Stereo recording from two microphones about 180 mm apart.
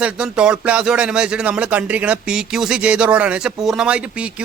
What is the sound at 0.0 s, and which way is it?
Speech, 5° right (ahead or behind).